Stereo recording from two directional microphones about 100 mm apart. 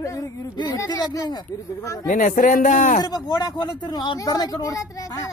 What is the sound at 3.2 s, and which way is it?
Speech, 40° left (ahead or behind).